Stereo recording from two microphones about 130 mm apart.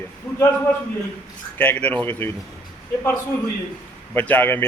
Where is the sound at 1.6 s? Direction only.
10° left (ahead or behind).